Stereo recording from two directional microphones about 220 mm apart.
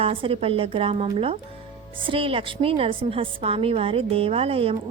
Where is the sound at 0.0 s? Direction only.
25° right (ahead or behind).